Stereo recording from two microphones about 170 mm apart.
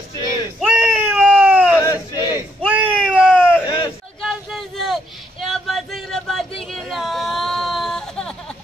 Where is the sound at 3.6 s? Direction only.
25° left (ahead or behind).